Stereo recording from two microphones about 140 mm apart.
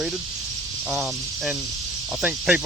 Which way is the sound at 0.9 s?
5° right (ahead or behind).